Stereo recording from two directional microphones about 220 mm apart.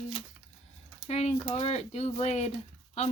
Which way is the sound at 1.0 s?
30° left (ahead or behind).